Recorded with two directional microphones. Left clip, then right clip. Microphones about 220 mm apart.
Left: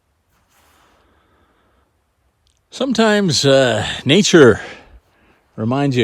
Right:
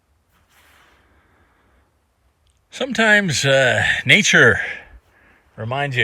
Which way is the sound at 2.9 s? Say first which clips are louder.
Even; 10° left (ahead or behind).